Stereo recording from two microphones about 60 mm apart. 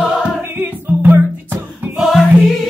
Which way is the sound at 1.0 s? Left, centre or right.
Right.